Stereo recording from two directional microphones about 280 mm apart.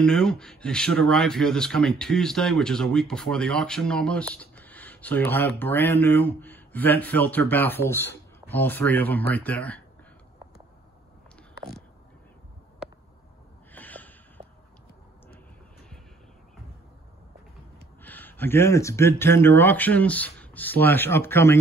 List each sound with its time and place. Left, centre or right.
0.0 s speech: centre
13.7 s snort: centre
14.4 s a sound: right
18.0 s speech: centre